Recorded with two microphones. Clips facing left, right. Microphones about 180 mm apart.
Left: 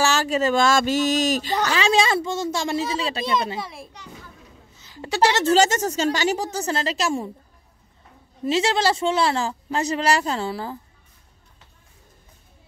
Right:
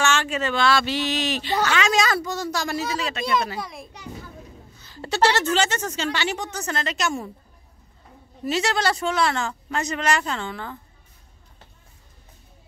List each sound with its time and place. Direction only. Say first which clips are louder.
0.0 s speech: left 3 dB; 35° left (ahead or behind)
1.7 s speech: left 4 dB; 30° left (ahead or behind)
3.6 s a child's voice: even; 5° left (ahead or behind)
4.7 s a sound: left 1 dB; 15° left (ahead or behind)
5.4 s speech: left 5 dB; 40° left (ahead or behind)
8.5 s speech: left 3 dB; 25° left (ahead or behind)